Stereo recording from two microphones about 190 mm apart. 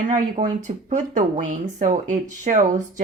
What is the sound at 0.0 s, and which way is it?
A woman's voice, 40° right (ahead or behind).